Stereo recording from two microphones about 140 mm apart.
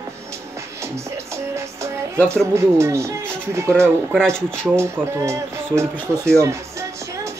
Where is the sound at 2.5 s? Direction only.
20° right (ahead or behind).